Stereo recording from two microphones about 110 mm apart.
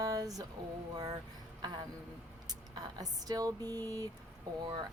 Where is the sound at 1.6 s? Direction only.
35° right (ahead or behind).